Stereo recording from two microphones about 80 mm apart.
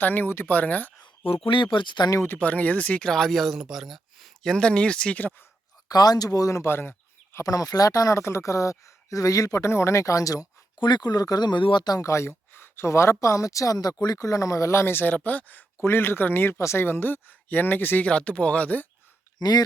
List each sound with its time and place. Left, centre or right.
0.0 s speech: left
1.5 s speech: left
2.2 s speech: left
3.1 s speech: centre
4.4 s speech: centre
5.9 s speech: left
7.3 s speech: left
10.8 s speech: left
11.9 s speech: left
14.2 s speech: left
18.1 s speech: centre
19.4 s speech: left